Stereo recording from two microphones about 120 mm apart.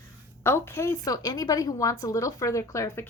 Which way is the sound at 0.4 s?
20° left (ahead or behind).